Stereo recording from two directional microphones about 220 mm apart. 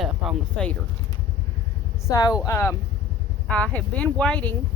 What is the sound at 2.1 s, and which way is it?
Speech, 15° left (ahead or behind).